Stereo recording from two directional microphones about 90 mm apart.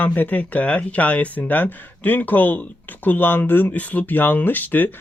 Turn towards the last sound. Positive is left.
turn(degrees=20)  # may be behind; listen again after turning